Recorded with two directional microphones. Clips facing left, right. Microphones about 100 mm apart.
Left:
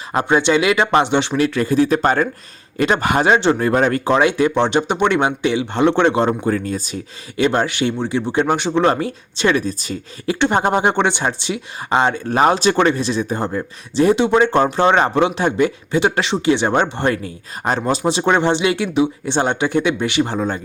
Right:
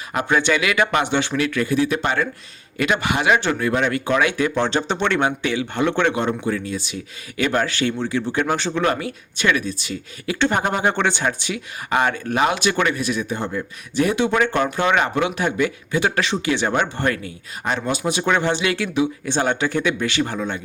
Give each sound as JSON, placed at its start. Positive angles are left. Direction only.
{"t": 0.1, "sound": "speech", "side_deg": 30}
{"t": 3.3, "sound": "speech", "side_deg": 30}
{"t": 6.2, "sound": "speech", "side_deg": 40}
{"t": 7.3, "sound": "speech", "side_deg": 25}
{"t": 8.9, "sound": "speech", "side_deg": 35}
{"t": 10.3, "sound": "speech", "side_deg": 25}